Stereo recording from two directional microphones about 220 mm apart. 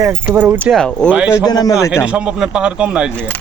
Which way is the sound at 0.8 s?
5° left (ahead or behind).